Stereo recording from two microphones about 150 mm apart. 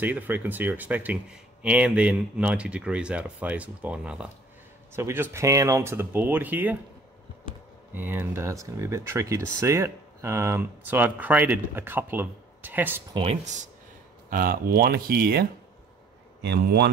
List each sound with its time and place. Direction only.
0.0 s speech: 10° right (ahead or behind)
7.9 s speech: 15° right (ahead or behind)
13.1 s speech: 40° right (ahead or behind)
14.3 s speech: 70° right (ahead or behind)